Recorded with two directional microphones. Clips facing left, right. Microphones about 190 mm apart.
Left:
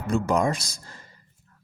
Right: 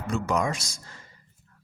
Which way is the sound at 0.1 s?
35° left (ahead or behind).